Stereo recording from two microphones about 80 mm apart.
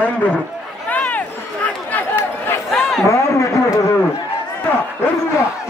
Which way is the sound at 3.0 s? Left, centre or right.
Left.